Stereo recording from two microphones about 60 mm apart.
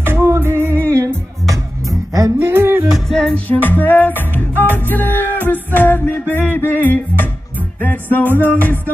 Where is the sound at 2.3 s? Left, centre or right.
Right.